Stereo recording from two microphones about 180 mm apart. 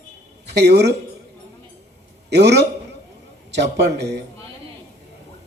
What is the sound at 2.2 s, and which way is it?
A man's voice, 70° right (ahead or behind).